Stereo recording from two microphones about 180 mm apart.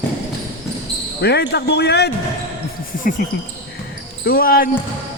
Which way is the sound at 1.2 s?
65° left (ahead or behind).